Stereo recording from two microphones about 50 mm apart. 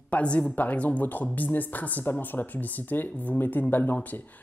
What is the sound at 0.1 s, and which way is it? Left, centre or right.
A woman's voice, left.